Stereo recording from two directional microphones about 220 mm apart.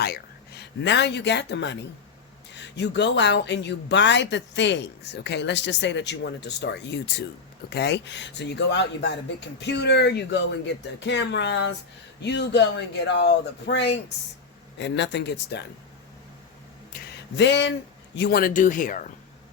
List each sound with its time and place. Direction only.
0.0 s speech: 45° left (ahead or behind)
16.9 s a sound: 50° left (ahead or behind)
18.2 s speech: 45° left (ahead or behind)